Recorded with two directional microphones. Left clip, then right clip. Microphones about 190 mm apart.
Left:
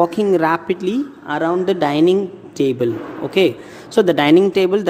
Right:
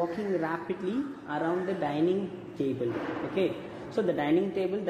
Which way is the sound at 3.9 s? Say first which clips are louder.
Left 15 dB; 35° left (ahead or behind).